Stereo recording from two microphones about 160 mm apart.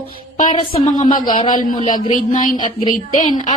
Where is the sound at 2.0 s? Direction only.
55° left (ahead or behind).